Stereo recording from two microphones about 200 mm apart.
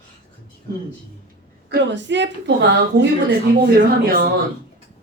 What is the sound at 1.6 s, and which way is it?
A woman's voice, 60° right (ahead or behind).